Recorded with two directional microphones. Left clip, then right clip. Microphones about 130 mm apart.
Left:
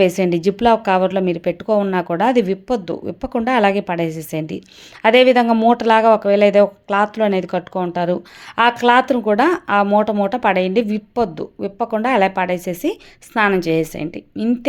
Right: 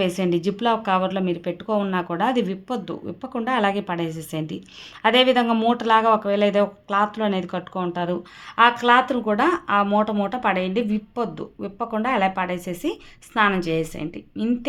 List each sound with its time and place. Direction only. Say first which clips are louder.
0.0 s speech: left 7 dB; 35° left (ahead or behind)